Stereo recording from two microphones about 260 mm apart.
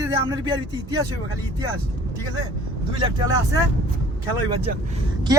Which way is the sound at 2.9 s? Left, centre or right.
Centre.